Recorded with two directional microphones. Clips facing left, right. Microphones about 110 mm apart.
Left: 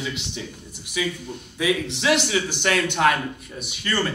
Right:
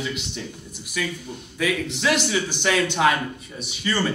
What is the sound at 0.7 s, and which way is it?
Speech, 20° left (ahead or behind).